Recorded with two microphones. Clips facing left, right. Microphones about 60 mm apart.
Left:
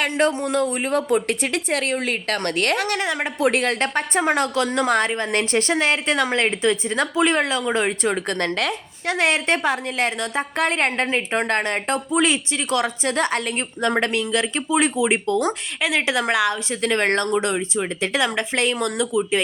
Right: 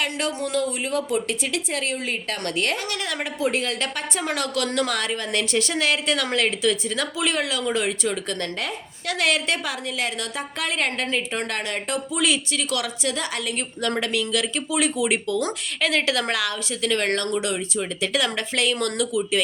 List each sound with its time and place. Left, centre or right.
0.0 s a woman's voice: left
9.0 s a woman's voice: left
14.0 s a woman's voice: left
15.8 s a woman's voice: centre
16.8 s a woman's voice: left